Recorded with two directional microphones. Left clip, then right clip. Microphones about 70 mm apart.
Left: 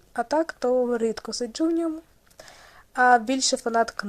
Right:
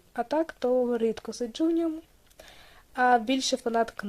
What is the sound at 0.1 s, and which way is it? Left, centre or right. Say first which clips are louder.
Speech: left 4 dB; right.